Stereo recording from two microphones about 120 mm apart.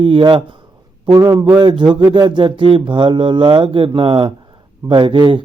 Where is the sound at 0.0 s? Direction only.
45° right (ahead or behind).